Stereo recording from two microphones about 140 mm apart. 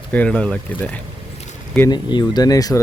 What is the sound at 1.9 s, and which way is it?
Speech, 30° left (ahead or behind).